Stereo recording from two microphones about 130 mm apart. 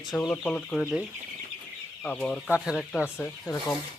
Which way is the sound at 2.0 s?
5° left (ahead or behind).